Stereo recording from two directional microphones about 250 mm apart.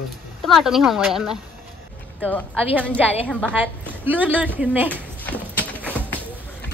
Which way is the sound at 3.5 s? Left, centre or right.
Centre.